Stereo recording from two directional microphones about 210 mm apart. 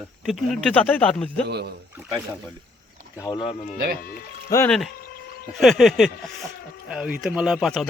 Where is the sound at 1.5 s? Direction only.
50° right (ahead or behind).